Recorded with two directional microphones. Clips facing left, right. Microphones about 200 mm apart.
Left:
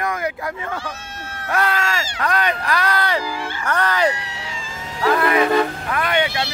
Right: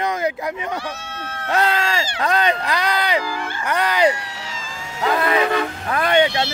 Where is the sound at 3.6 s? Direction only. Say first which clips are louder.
Right 2 dB; 15° right (ahead or behind).